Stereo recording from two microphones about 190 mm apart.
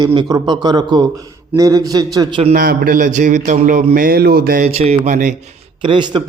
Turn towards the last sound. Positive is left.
turn(degrees=-25)  # may be behind; listen again after turning